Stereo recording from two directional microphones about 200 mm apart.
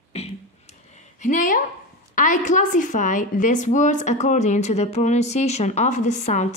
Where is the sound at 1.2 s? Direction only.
40° left (ahead or behind).